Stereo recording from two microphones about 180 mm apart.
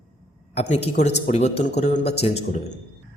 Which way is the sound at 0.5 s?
35° left (ahead or behind).